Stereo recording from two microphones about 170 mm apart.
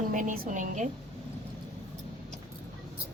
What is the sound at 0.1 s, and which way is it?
Speech, 50° right (ahead or behind).